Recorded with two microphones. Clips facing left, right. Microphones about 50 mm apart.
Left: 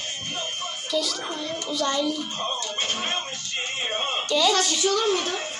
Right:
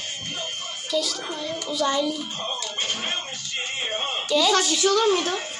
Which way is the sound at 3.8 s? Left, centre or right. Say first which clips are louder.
Left 2 dB; centre.